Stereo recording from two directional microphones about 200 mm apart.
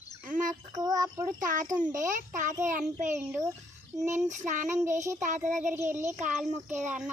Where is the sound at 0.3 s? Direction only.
40° right (ahead or behind).